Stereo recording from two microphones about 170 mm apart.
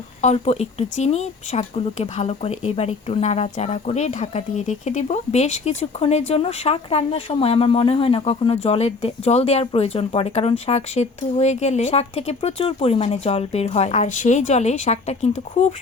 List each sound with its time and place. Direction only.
0.2 s speech: 40° left (ahead or behind)